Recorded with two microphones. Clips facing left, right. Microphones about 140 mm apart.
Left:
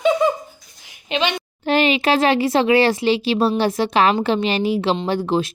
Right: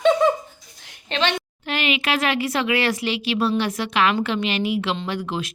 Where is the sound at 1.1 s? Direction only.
15° left (ahead or behind).